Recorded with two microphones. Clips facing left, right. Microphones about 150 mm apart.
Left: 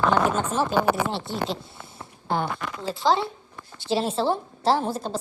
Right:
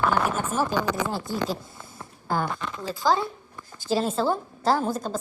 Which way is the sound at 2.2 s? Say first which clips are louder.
Left 1 dB; 25° left (ahead or behind).